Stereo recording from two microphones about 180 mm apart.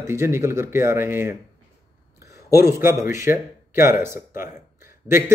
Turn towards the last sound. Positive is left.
turn(degrees=-15)  # may be behind; listen again after turning